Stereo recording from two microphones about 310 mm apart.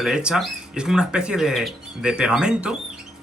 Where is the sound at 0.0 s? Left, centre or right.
Centre.